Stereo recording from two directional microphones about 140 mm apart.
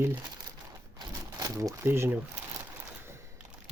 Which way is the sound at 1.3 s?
25° right (ahead or behind).